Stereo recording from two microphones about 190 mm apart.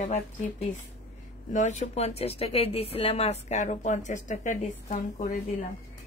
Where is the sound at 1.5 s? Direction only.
40° left (ahead or behind).